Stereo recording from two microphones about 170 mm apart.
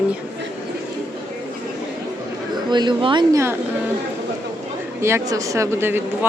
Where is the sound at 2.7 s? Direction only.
25° right (ahead or behind).